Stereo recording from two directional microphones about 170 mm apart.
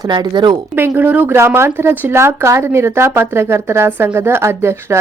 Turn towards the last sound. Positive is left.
turn(degrees=-15)  # may be behind; listen again after turning